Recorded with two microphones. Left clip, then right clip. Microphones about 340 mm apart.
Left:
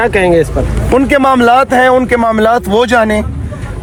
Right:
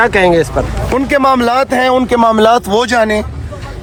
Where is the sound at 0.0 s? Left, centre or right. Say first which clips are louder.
Even; right.